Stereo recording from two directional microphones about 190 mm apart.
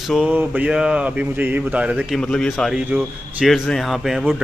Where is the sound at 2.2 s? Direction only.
5° left (ahead or behind).